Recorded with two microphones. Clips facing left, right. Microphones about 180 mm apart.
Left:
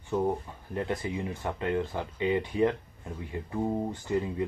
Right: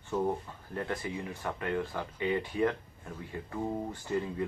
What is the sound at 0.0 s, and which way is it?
Speech, 15° left (ahead or behind).